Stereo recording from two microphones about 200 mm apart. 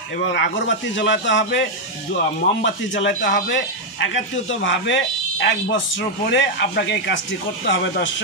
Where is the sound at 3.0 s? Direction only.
65° left (ahead or behind).